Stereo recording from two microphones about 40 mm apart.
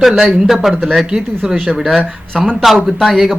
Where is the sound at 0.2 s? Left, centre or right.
Centre.